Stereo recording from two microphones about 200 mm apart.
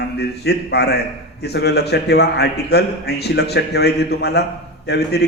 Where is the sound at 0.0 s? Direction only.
55° left (ahead or behind).